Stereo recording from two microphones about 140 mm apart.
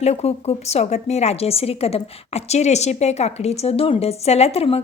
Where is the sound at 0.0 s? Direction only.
50° left (ahead or behind).